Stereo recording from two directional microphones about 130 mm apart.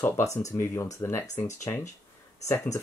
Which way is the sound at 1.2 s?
65° left (ahead or behind).